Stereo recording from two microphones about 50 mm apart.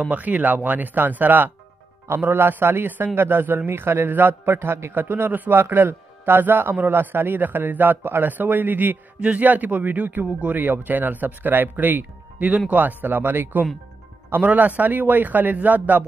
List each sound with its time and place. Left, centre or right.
0.1 s speech: right
2.2 s a man's voice: right
4.9 s speech: right
5.5 s speech: right